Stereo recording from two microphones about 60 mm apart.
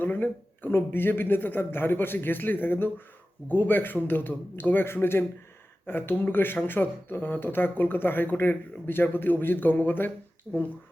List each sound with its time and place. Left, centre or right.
0.0 s speech: left
10.5 s speech: centre